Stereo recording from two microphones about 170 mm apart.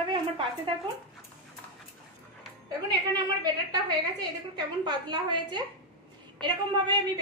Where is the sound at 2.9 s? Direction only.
25° right (ahead or behind).